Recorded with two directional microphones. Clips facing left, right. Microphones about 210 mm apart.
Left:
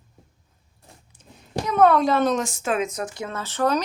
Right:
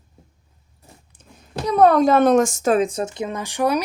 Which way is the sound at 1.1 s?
55° right (ahead or behind).